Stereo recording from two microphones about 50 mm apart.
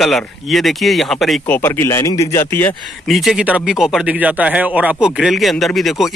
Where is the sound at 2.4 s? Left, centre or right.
Left.